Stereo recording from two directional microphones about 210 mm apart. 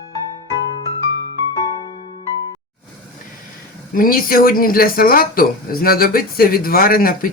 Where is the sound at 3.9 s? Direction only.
40° left (ahead or behind).